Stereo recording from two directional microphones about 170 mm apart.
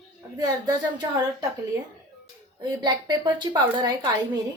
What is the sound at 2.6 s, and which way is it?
A woman's voice, 25° right (ahead or behind).